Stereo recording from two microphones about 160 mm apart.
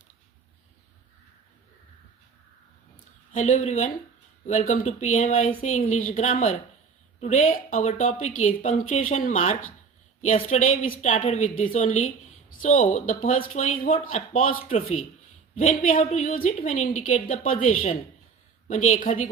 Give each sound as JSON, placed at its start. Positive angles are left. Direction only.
{"t": 3.3, "sound": "speech", "side_deg": 45}
{"t": 14.6, "sound": "speech", "side_deg": 35}
{"t": 15.5, "sound": "a woman's voice", "side_deg": 55}
{"t": 16.0, "sound": "speech", "side_deg": 45}
{"t": 16.3, "sound": "a woman's voice", "side_deg": 60}
{"t": 18.7, "sound": "a woman's voice", "side_deg": 55}